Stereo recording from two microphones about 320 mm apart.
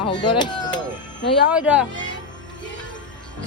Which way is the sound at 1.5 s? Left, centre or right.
Centre.